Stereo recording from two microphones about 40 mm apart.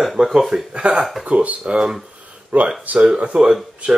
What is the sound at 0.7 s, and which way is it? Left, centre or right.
Speech, right.